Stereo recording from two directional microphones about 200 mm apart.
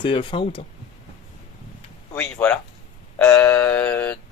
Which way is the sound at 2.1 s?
10° left (ahead or behind).